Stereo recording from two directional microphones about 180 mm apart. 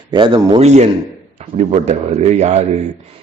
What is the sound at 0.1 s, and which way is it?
Speech, 25° right (ahead or behind).